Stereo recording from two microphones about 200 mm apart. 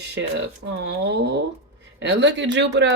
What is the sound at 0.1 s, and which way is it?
Speech, 60° right (ahead or behind).